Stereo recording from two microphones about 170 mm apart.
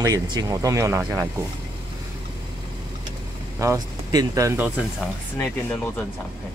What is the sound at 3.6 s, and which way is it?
Speech, 20° right (ahead or behind).